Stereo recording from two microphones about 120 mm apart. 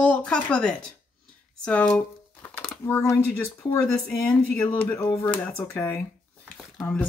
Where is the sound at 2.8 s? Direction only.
20° left (ahead or behind).